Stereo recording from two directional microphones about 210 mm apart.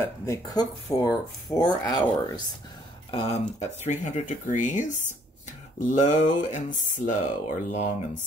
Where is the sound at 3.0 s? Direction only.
30° left (ahead or behind).